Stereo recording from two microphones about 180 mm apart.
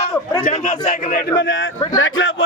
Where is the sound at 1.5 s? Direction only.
90° left.